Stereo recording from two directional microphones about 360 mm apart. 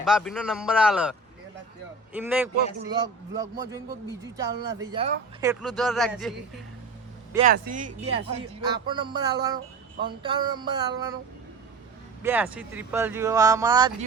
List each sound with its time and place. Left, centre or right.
0.0 s a man's voice: centre
2.1 s a man's voice: centre
7.3 s speech: right
12.2 s speech: centre